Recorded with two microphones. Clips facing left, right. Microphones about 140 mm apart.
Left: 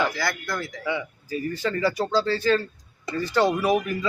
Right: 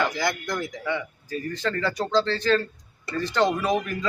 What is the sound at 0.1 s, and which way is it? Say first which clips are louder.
Speech: right 2 dB; 20° right (ahead or behind).